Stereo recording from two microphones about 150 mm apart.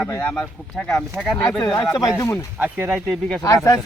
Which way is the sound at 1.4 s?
20° left (ahead or behind).